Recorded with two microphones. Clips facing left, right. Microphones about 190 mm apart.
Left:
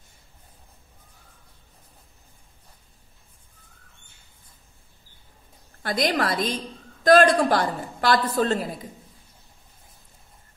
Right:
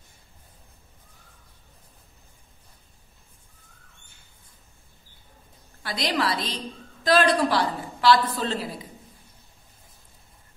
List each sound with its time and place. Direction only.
5.8 s a woman's voice: 50° left (ahead or behind)